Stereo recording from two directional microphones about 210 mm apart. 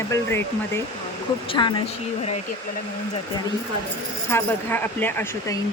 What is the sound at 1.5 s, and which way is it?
Speech, 20° left (ahead or behind).